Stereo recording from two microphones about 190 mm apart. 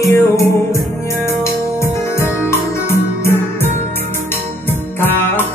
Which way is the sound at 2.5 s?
15° left (ahead or behind).